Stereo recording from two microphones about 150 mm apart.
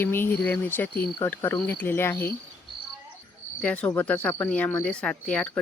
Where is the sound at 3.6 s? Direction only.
5° left (ahead or behind).